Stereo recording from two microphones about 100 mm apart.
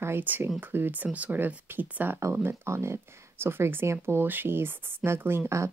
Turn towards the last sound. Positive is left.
turn(degrees=-30)  # may be behind; listen again after turning